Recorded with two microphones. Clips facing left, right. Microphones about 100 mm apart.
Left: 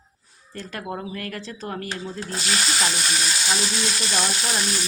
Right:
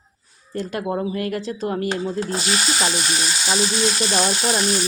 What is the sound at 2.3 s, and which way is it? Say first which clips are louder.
Stir: right 3 dB; 20° right (ahead or behind).